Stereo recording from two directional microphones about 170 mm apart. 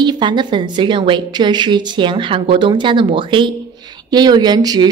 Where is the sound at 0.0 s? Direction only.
25° right (ahead or behind).